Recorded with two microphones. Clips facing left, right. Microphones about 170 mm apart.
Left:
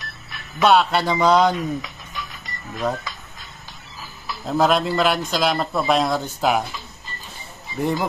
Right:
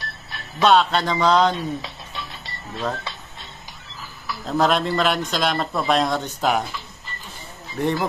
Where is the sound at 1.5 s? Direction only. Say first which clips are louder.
Left 2 dB; 30° right (ahead or behind).